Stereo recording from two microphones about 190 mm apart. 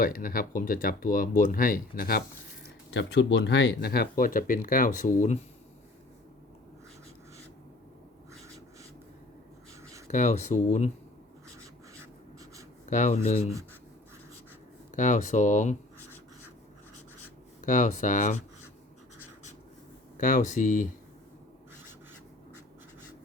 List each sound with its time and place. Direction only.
0.0 s speech: 45° left (ahead or behind)
2.9 s speech: 70° left (ahead or behind); by 5.4 s 40° left (ahead or behind)
8.3 s rub: 15° right (ahead or behind)
10.1 s speech: 35° left (ahead or behind)
12.8 s speech: 40° left (ahead or behind)
14.9 s speech: 40° left (ahead or behind)
17.7 s speech: 40° left (ahead or behind)
20.1 s speech: 40° left (ahead or behind)